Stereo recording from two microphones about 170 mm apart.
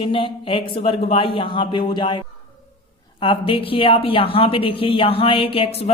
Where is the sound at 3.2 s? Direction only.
30° left (ahead or behind).